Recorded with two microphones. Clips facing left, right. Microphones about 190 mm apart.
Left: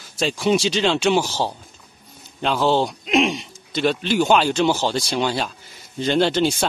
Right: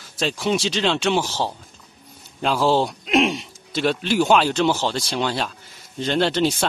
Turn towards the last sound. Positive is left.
turn(degrees=0)  # may be behind; listen again after turning